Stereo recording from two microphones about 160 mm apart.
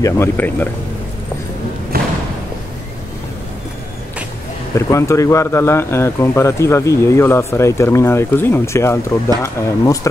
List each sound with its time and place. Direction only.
0.0 s speech: 15° left (ahead or behind)
1.9 s thump: 70° right (ahead or behind)
4.7 s speech: 20° left (ahead or behind)